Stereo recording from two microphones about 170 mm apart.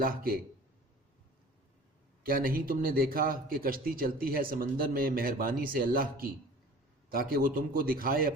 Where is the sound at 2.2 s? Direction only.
55° right (ahead or behind).